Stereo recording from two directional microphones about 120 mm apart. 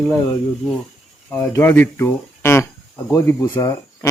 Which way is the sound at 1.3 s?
20° left (ahead or behind).